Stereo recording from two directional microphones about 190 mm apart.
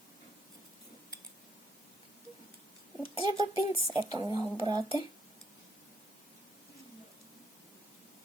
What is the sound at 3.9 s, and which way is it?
Speech, 20° right (ahead or behind).